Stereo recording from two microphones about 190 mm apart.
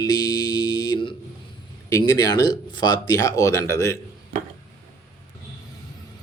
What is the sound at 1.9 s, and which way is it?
Speech, 20° left (ahead or behind).